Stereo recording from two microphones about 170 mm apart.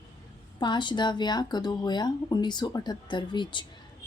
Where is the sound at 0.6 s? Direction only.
25° left (ahead or behind).